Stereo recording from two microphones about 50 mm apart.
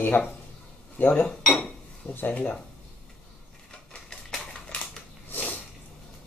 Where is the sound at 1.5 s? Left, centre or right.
Left.